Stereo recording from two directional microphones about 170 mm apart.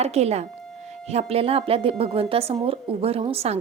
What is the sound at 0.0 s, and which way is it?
Speech, 40° right (ahead or behind).